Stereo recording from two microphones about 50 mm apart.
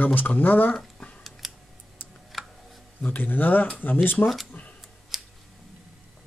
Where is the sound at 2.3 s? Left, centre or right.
Centre.